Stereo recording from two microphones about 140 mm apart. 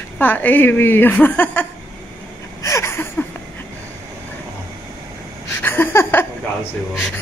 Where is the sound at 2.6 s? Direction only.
20° left (ahead or behind).